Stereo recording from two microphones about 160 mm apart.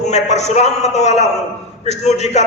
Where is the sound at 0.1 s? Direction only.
45° left (ahead or behind).